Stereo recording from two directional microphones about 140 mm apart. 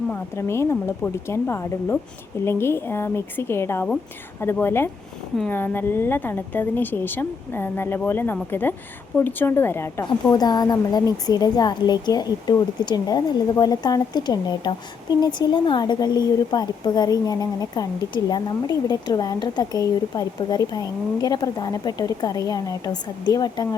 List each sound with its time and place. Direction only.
0.1 s speech: 20° left (ahead or behind)
10.2 s speech: 30° left (ahead or behind)